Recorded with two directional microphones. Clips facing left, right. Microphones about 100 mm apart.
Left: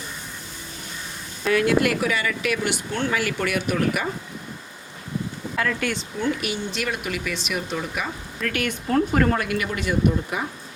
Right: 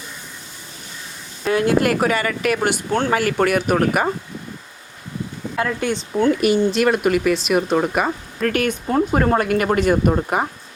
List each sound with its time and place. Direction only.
1.5 s speech: 35° right (ahead or behind)
5.5 s speech: 25° right (ahead or behind)
6.1 s speech: 50° right (ahead or behind)
8.7 s speech: 20° right (ahead or behind)
9.4 s speech: 45° right (ahead or behind)